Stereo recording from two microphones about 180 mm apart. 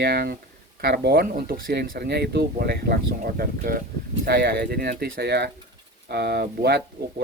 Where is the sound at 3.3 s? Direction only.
55° right (ahead or behind).